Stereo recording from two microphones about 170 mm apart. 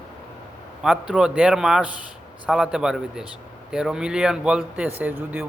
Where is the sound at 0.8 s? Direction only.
5° right (ahead or behind).